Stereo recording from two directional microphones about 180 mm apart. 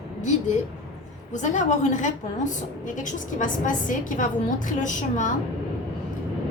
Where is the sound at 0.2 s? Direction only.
40° left (ahead or behind).